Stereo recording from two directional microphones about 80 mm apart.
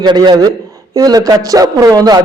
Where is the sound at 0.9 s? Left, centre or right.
Right.